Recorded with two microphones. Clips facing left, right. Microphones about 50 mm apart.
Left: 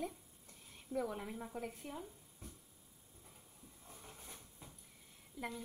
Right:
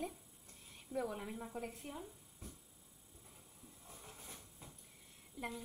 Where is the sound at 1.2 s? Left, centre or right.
Centre.